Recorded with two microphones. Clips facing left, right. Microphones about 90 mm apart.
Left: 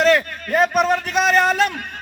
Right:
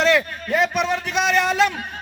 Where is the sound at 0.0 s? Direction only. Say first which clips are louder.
Left 2 dB; 45° left (ahead or behind).